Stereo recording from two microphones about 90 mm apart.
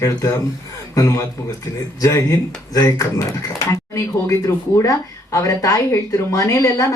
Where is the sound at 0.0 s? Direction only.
30° left (ahead or behind).